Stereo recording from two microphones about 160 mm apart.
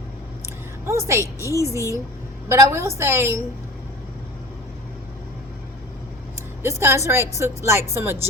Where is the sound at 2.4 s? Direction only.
15° right (ahead or behind).